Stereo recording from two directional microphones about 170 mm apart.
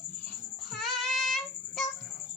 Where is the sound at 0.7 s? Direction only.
Centre (ahead or behind).